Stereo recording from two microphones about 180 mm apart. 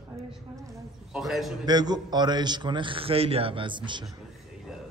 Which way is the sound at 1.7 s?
25° right (ahead or behind).